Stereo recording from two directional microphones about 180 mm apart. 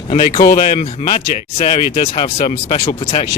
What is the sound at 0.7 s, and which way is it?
Speech, 35° left (ahead or behind).